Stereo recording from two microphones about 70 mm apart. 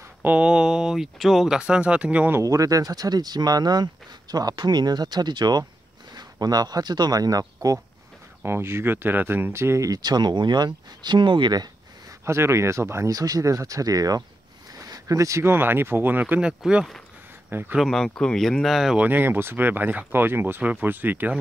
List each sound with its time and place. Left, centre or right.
0.2 s speech: centre
1.6 s speech: centre
2.4 s speech: right
8.5 s speech: right
9.8 s speech: right
12.3 s speech: right
13.1 s speech: right
14.9 s a sound: right
15.4 s speech: right
16.3 s speech: centre
17.5 s speech: right
17.7 s speech: centre
18.9 s speech: right